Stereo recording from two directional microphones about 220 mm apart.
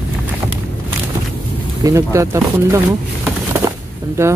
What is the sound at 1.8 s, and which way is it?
Speech, 15° right (ahead or behind).